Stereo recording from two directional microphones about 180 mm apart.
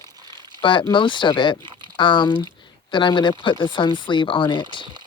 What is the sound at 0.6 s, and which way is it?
Speech, 25° left (ahead or behind).